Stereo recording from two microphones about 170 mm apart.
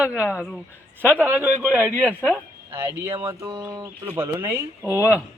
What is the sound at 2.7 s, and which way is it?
A man's voice, 15° right (ahead or behind).